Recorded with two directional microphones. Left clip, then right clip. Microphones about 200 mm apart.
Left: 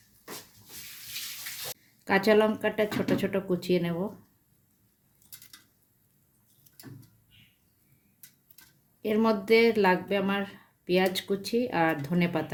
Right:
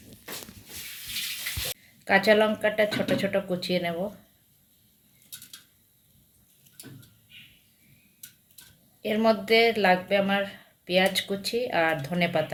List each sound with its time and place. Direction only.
2.0 s speech: 55° left (ahead or behind)
9.0 s speech: 55° left (ahead or behind)